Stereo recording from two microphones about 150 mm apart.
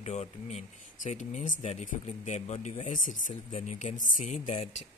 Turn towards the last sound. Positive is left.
turn(degrees=40)  # may be behind; listen again after turning